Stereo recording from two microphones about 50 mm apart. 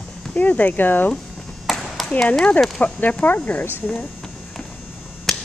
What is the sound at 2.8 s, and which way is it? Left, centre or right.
Speech, left.